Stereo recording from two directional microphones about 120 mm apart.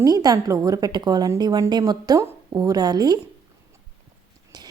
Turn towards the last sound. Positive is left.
turn(degrees=-35)  # may be behind; listen again after turning